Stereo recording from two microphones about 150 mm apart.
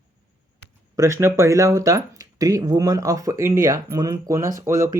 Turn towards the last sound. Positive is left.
turn(degrees=-20)  # may be behind; listen again after turning